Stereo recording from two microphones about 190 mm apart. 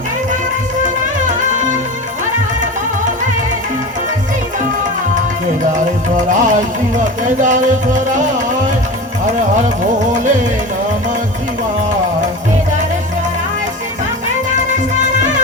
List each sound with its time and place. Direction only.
5.7 s music: 40° right (ahead or behind)